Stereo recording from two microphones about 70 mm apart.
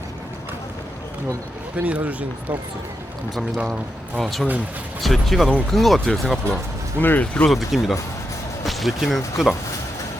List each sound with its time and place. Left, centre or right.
1.7 s speech: right
4.2 s speech: centre
7.0 s speech: left
7.4 s speech: centre